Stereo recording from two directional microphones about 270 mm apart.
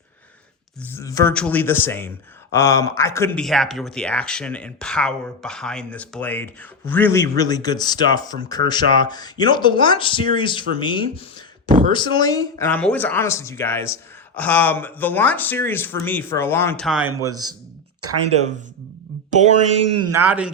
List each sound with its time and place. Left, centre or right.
0.9 s speech: centre
18.0 s speech: right
20.1 s a man's voice: centre